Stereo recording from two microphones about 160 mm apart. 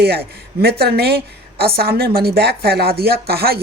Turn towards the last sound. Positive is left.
turn(degrees=-75)  # may be behind; listen again after turning